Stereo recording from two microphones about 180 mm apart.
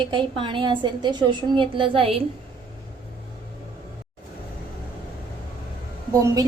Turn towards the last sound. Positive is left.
turn(degrees=-20)  # may be behind; listen again after turning